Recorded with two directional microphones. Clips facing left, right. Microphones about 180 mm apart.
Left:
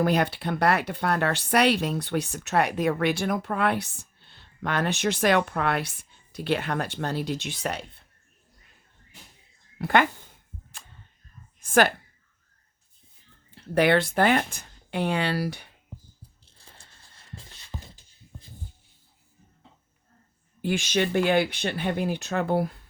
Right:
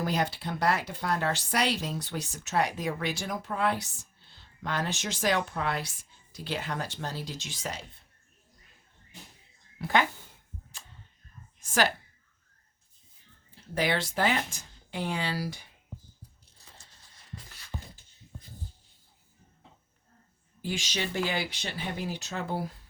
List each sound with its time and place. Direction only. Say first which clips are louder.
0.0 s speech: left 6 dB; 60° left (ahead or behind)
9.7 s speech: left 5 dB; 60° left (ahead or behind)
11.6 s a sound: left 6 dB; 55° left (ahead or behind)
13.6 s speech: left 8 dB; 60° left (ahead or behind)
16.6 s a sound: left 2 dB; 55° left (ahead or behind)
17.3 s music: left 1 dB; 25° left (ahead or behind)
20.6 s speech: left 8 dB; 55° left (ahead or behind)